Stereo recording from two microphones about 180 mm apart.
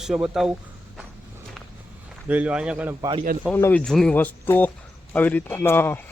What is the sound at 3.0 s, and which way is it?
Speech, 25° right (ahead or behind).